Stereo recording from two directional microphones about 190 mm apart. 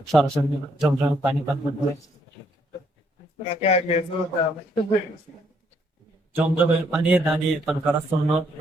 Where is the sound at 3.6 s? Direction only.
35° left (ahead or behind).